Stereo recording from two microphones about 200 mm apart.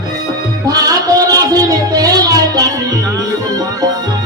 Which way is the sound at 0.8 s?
15° right (ahead or behind).